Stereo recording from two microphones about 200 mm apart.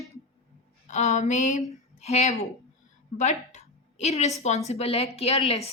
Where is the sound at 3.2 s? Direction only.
35° left (ahead or behind).